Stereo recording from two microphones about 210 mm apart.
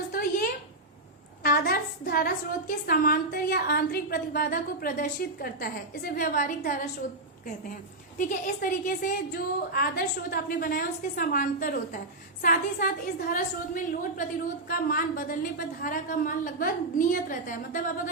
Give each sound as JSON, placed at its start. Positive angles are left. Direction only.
{"t": 0.1, "sound": "a sound", "side_deg": 45}
{"t": 1.5, "sound": "a woman's voice", "side_deg": 45}
{"t": 8.2, "sound": "a woman's voice", "side_deg": 40}